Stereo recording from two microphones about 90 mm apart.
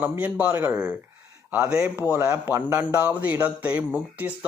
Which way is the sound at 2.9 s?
15° right (ahead or behind).